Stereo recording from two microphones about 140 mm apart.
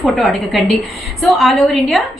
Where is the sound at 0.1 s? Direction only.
Centre (ahead or behind).